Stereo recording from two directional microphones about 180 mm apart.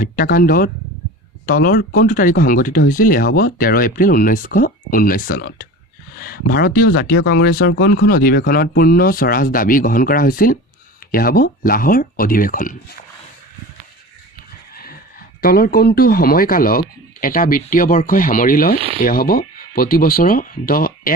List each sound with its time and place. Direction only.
0.0 s speech: 55° left (ahead or behind)
14.7 s a sound: 55° left (ahead or behind)
15.4 s speech: 55° left (ahead or behind)